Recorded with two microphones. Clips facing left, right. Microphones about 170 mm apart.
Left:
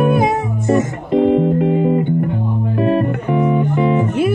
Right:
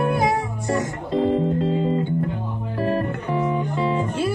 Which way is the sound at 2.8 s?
20° left (ahead or behind).